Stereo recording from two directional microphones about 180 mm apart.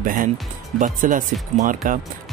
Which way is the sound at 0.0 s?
50° right (ahead or behind).